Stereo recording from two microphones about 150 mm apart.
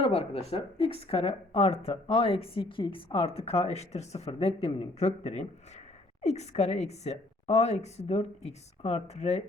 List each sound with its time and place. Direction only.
0.0 s a woman's voice: 45° left (ahead or behind)